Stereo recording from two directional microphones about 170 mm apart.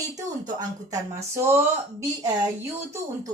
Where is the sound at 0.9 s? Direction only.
15° right (ahead or behind).